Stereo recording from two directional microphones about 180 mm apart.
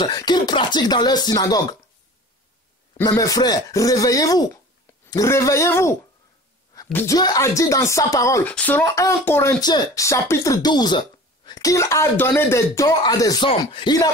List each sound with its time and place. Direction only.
0.0 s speech: 25° left (ahead or behind)
3.0 s speech: 20° left (ahead or behind)
6.7 s a sound: 15° left (ahead or behind)
7.2 s speech: 20° left (ahead or behind)